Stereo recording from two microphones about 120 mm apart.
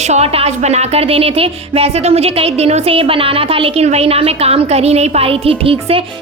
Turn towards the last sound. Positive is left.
turn(degrees=-50)  # may be behind; listen again after turning